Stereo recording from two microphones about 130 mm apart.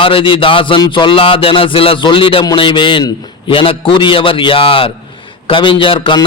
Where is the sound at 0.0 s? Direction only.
45° left (ahead or behind).